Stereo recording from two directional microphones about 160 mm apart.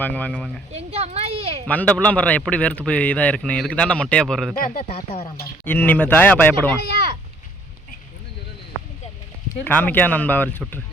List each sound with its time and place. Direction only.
0.0 s a man's voice: 10° left (ahead or behind)
0.7 s a sound: 40° right (ahead or behind)
1.6 s a man's voice: 10° left (ahead or behind)
4.5 s speech: 60° left (ahead or behind)
4.8 s speech: 40° left (ahead or behind)
5.6 s a man's voice: 10° left (ahead or behind)
9.5 s a man's voice: 10° left (ahead or behind)